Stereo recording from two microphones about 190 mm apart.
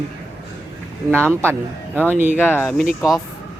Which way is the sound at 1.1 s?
10° right (ahead or behind).